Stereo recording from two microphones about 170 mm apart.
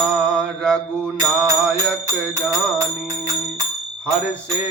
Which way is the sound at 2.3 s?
20° right (ahead or behind).